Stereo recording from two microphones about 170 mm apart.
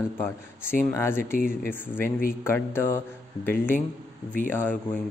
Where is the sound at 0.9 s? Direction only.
15° left (ahead or behind).